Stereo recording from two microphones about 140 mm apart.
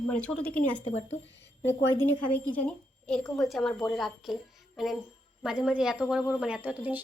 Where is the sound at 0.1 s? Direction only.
10° left (ahead or behind).